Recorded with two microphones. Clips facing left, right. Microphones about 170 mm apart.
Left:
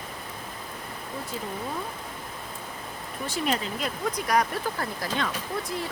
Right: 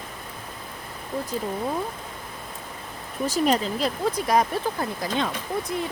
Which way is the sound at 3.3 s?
40° right (ahead or behind).